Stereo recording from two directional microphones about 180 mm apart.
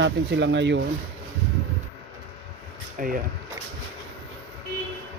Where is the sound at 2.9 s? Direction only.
50° right (ahead or behind).